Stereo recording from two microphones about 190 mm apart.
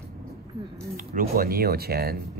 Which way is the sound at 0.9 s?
45° right (ahead or behind).